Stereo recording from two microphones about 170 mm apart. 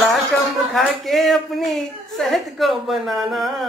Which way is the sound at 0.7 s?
Centre (ahead or behind).